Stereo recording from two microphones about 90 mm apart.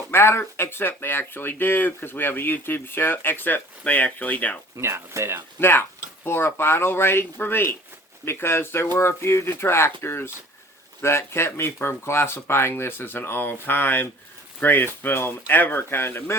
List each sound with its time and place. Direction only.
0.1 s speech: 25° left (ahead or behind)
4.8 s speech: 30° right (ahead or behind)
5.5 s speech: 25° left (ahead or behind)